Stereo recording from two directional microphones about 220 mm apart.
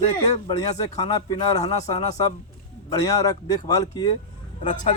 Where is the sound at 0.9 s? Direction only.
20° left (ahead or behind).